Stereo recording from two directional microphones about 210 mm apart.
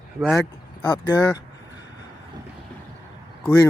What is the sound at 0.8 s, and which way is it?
Speech, 20° left (ahead or behind).